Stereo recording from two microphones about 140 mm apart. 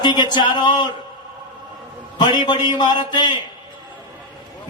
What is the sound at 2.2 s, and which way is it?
Speech, 30° left (ahead or behind).